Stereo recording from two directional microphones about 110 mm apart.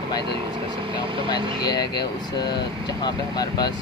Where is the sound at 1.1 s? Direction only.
50° right (ahead or behind).